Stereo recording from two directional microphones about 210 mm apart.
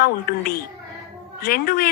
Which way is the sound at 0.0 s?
45° left (ahead or behind).